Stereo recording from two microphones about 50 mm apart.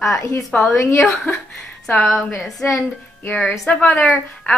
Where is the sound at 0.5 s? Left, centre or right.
Left.